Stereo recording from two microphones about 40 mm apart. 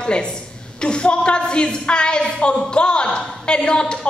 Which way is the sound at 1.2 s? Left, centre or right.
Left.